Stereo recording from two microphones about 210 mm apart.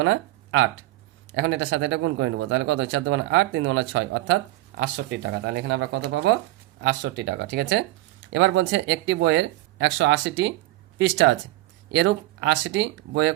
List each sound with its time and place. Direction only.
0.0 s speech: 65° right (ahead or behind)